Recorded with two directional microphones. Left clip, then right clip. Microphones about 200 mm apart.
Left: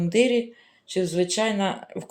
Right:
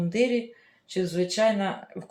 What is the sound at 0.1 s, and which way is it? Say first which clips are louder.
Speech: left 5 dB; 50° left (ahead or behind).